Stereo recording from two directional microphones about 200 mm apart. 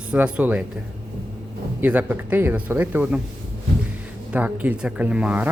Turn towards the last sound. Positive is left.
turn(degrees=-5)  # may be behind; listen again after turning